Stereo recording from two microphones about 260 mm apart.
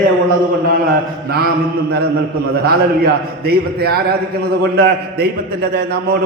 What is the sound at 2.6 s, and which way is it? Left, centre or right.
A man's voice, right.